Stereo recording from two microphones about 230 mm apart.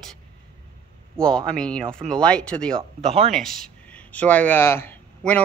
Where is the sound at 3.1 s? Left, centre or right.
Right.